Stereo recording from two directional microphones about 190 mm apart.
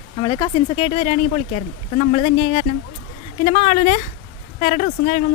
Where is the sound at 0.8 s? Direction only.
35° left (ahead or behind).